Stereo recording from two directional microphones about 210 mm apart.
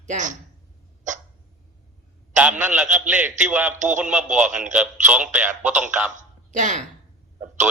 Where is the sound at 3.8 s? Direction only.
35° right (ahead or behind).